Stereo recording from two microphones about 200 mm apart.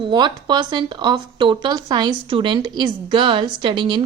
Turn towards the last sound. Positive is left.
turn(degrees=-25)  # may be behind; listen again after turning